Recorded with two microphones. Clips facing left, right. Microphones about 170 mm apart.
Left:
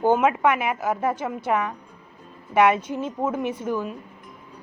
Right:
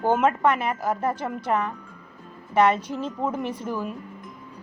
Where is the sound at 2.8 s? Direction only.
55° left (ahead or behind).